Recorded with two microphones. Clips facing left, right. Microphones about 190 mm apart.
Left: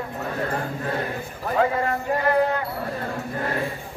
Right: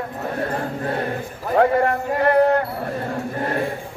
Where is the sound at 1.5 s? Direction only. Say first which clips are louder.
Right 6 dB; 60° right (ahead or behind).